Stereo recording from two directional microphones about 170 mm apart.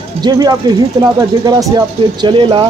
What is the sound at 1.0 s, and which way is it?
Speech, 20° right (ahead or behind).